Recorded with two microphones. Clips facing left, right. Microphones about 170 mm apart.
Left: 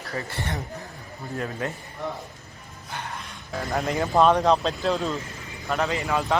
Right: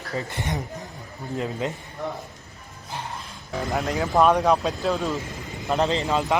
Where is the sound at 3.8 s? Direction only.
Centre (ahead or behind).